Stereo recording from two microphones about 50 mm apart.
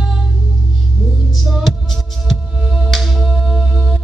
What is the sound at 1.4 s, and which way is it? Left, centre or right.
Music, centre.